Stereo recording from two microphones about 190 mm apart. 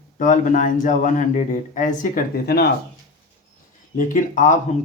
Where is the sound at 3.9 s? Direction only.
40° left (ahead or behind).